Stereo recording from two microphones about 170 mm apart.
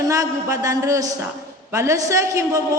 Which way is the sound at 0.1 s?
20° right (ahead or behind).